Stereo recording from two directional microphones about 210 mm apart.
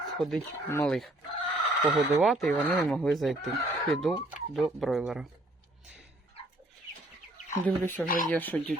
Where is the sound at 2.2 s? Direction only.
Centre (ahead or behind).